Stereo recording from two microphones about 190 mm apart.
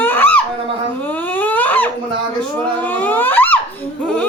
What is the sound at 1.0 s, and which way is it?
Dog, 10° left (ahead or behind).